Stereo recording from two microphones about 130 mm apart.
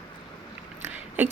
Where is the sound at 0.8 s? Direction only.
15° right (ahead or behind).